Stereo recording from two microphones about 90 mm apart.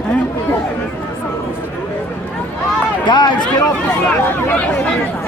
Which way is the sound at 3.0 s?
55° left (ahead or behind).